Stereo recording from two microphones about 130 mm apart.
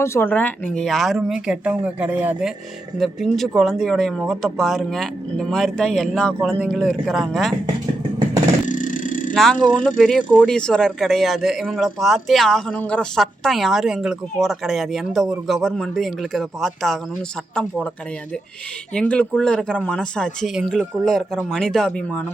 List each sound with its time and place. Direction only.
0.0 s a man's voice: 20° left (ahead or behind); by 2.5 s 10° right (ahead or behind)
3.0 s a man's voice: centre (ahead or behind)
8.6 s vehicle: 80° left
9.3 s a man's voice: 5° left (ahead or behind)
18.9 s a man's voice: 10° left (ahead or behind)